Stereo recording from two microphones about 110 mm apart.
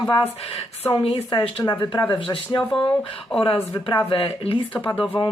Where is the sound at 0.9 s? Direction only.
55° left (ahead or behind).